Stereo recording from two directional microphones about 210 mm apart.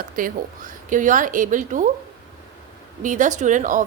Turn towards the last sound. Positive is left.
turn(degrees=-40)  # may be behind; listen again after turning